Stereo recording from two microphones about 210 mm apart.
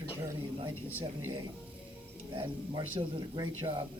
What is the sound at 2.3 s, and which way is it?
Speech, 25° right (ahead or behind).